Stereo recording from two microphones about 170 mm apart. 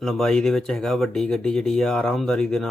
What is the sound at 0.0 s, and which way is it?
Speech, 5° left (ahead or behind).